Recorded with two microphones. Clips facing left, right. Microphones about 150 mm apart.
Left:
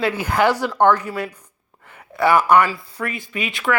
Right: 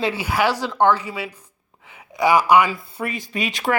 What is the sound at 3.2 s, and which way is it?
Speech, 35° right (ahead or behind).